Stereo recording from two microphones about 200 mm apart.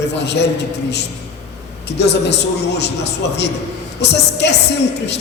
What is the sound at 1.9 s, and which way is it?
A man's voice, 60° left (ahead or behind).